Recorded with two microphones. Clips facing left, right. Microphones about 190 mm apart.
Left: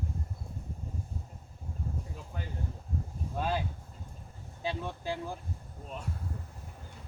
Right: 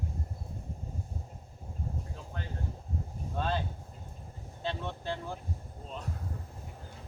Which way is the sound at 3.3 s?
10° left (ahead or behind).